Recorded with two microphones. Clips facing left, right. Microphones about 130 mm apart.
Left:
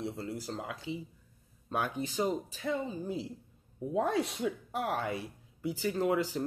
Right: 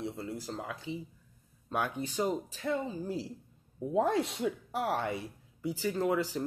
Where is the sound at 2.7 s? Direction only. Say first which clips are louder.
Right 1 dB; centre (ahead or behind).